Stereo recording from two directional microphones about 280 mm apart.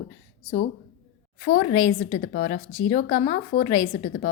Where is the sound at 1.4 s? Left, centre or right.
Left.